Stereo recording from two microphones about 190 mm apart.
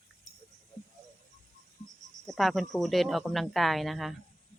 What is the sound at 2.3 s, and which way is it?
Speech, centre (ahead or behind).